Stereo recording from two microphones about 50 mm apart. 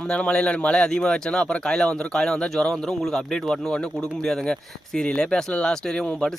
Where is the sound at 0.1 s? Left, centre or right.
Left.